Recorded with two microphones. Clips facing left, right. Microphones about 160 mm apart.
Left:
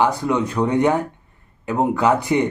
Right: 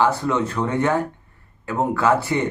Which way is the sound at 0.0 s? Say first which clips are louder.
Left 1 dB; 15° left (ahead or behind).